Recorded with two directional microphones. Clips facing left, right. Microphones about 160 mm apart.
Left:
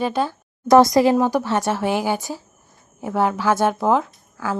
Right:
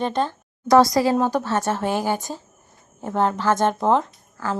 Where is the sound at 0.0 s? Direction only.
5° left (ahead or behind).